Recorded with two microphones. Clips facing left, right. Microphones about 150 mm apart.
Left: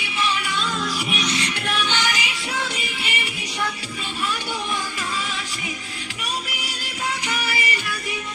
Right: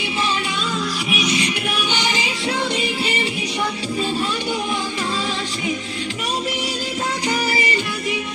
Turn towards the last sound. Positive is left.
turn(degrees=-30)  # may be behind; listen again after turning